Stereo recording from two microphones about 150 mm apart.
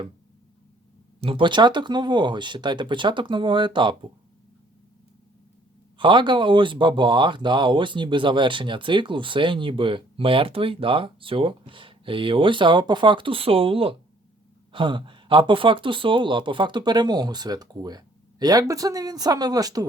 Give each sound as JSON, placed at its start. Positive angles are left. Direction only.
{"t": 1.2, "sound": "speech", "side_deg": -35}
{"t": 6.0, "sound": "speech", "side_deg": -30}